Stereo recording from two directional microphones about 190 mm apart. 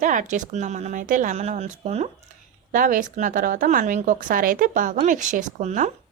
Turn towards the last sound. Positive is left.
turn(degrees=-40)  # may be behind; listen again after turning